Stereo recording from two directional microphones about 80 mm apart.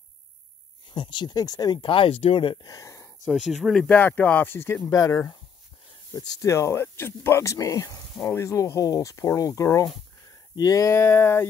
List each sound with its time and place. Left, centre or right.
0.8 s speech: left
1.8 s speech: left
2.6 s a sound: left
3.3 s speech: centre
3.7 s speech: centre
4.0 s speech: left
4.8 s speech: left
10.5 s speech: left
11.0 s speech: left